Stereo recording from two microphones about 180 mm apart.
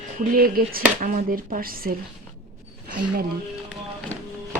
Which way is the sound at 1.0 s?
45° right (ahead or behind).